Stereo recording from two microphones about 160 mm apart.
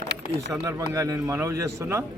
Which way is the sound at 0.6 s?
20° right (ahead or behind).